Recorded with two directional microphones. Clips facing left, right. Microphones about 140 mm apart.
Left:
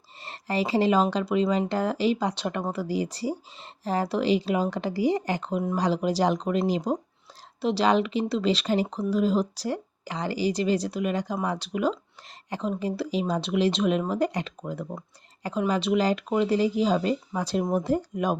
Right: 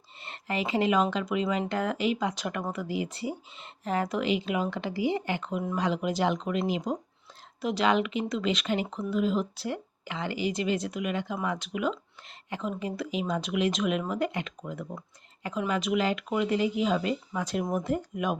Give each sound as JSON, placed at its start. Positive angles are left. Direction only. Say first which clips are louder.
{"t": 0.2, "sound": "speech", "louder": "left 4 dB", "side_deg": 35}